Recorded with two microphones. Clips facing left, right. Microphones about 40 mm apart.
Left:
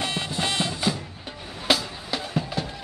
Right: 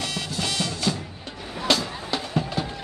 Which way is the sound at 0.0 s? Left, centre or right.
Left.